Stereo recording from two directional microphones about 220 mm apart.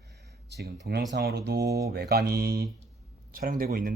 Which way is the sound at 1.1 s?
50° right (ahead or behind).